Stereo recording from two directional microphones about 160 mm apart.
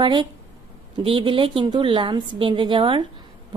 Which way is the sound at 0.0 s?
30° right (ahead or behind).